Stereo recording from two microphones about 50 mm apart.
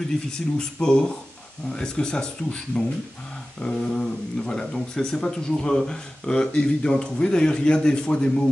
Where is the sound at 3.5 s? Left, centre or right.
Centre.